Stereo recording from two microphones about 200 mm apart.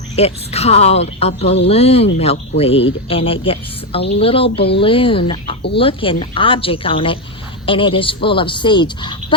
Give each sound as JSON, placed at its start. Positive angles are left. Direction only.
{"t": 0.2, "sound": "speech", "side_deg": 30}